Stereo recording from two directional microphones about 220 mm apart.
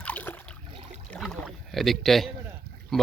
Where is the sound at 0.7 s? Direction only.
25° right (ahead or behind).